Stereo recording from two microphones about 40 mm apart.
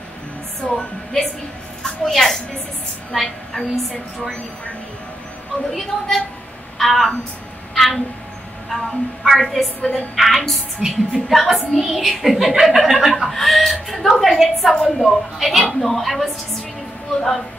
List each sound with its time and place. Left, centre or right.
0.7 s a woman's voice: centre
5.7 s a woman's voice: centre
7.7 s a sound: centre
9.2 s a woman's voice: centre
9.8 s a woman's voice: left
10.1 s a woman's voice: centre
10.8 s a woman's voice: centre
11.2 s a woman's voice: centre